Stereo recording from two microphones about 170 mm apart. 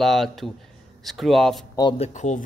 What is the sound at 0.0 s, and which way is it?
Speech, centre (ahead or behind).